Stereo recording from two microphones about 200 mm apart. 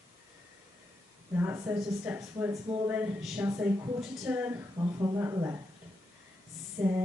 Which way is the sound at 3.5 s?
15° right (ahead or behind).